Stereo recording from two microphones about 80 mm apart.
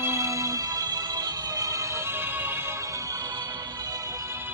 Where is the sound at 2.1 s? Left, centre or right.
Right.